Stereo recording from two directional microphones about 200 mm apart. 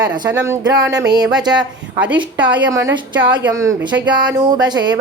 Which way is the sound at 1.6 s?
5° right (ahead or behind).